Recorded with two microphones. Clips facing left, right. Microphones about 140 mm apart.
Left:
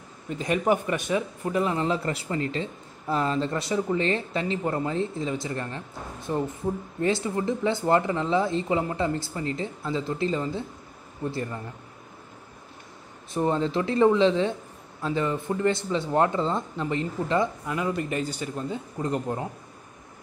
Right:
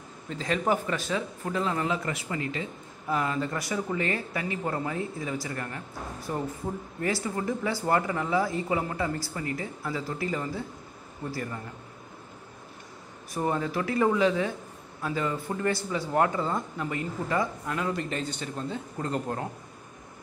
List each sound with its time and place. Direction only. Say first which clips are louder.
0.3 s speech: left 3 dB; 15° left (ahead or behind)
1.8 s speech: left 3 dB; 30° left (ahead or behind)
7.0 s speech: left 4 dB; 25° left (ahead or behind)
13.3 s speech: left 4 dB; 25° left (ahead or behind)
17.6 s speech: left 2 dB; 10° left (ahead or behind)